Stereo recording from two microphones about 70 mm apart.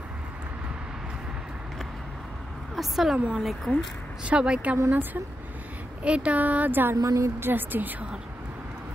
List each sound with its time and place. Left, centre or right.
2.7 s a woman's voice: centre
4.2 s a woman's voice: centre
4.7 s speech: right
6.0 s speech: centre
7.0 s a woman's voice: right
7.3 s speech: right